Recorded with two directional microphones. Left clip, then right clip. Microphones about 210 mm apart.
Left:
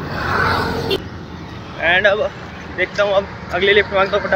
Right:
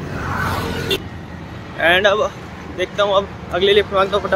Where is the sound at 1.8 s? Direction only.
35° right (ahead or behind).